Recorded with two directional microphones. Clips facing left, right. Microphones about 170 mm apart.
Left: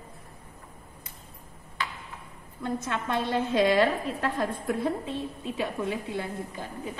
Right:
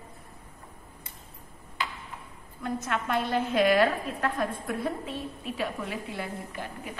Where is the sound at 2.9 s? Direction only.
25° left (ahead or behind).